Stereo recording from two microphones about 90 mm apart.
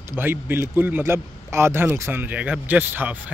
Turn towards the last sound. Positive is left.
turn(degrees=-20)  # may be behind; listen again after turning